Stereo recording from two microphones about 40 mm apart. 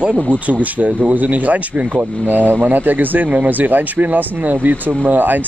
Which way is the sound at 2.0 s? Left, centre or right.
Right.